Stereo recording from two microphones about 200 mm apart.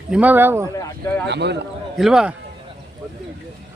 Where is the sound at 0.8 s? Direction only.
15° left (ahead or behind).